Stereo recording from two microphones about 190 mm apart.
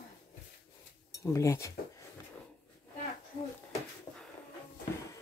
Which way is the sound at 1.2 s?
15° left (ahead or behind).